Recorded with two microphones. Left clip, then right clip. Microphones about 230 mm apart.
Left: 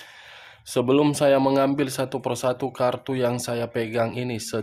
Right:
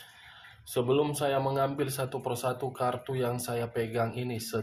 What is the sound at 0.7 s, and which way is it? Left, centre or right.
Speech, left.